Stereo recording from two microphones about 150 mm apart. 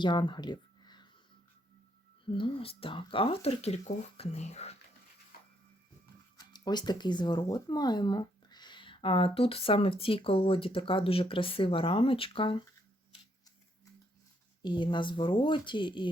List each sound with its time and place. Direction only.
0.0 s speech: 30° left (ahead or behind)
2.2 s speech: 35° left (ahead or behind)
5.3 s printer: 85° left
6.3 s speech: 30° left (ahead or behind)
14.6 s speech: 30° left (ahead or behind)